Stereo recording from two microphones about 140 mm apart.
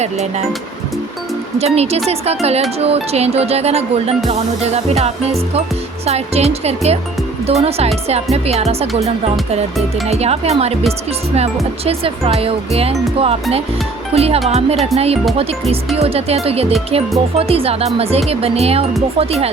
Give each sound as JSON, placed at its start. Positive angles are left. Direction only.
{"t": 0.0, "sound": "speech", "side_deg": -50}
{"t": 1.5, "sound": "speech", "side_deg": -50}
{"t": 10.1, "sound": "speech", "side_deg": -50}
{"t": 11.9, "sound": "speech", "side_deg": -45}